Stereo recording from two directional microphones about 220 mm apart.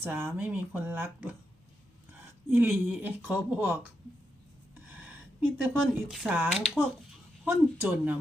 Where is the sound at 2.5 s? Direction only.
5° right (ahead or behind).